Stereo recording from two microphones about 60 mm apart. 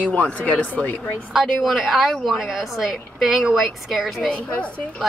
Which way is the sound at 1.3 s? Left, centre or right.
Centre.